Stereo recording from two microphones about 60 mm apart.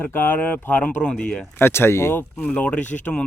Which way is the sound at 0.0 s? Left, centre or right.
Left.